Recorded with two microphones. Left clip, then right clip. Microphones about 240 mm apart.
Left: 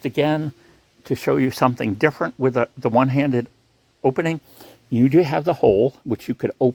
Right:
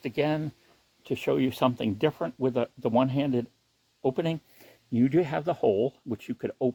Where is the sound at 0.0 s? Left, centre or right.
Left.